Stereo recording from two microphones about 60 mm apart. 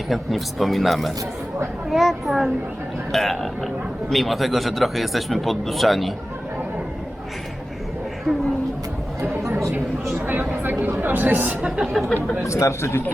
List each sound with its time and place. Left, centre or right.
0.1 s speech: centre
10.5 s speech: right
11.9 s speech: centre
12.5 s speech: left